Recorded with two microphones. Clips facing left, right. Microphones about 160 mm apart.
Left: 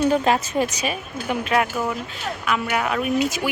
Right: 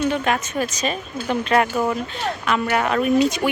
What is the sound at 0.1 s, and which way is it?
Speech, 30° left (ahead or behind).